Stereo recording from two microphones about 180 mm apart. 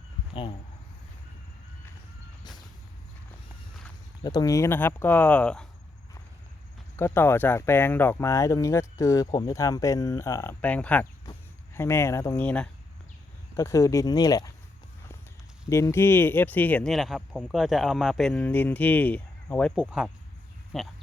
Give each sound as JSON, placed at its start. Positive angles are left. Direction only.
{"t": 4.2, "sound": "speech", "side_deg": 20}
{"t": 6.9, "sound": "speech", "side_deg": 15}
{"t": 13.6, "sound": "speech", "side_deg": 20}
{"t": 15.7, "sound": "speech", "side_deg": 15}
{"t": 19.7, "sound": "speech", "side_deg": -5}